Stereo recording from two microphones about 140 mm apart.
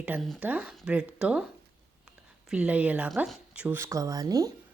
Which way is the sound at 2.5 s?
10° right (ahead or behind).